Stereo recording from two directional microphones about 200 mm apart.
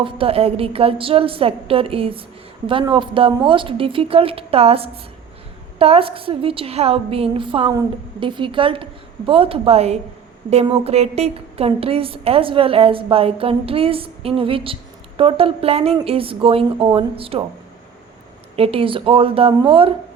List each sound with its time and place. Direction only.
0.0 s a woman's voice: 30° right (ahead or behind)
18.5 s a woman's voice: 30° right (ahead or behind)